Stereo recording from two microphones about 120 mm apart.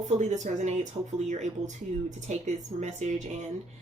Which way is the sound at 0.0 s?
80° right.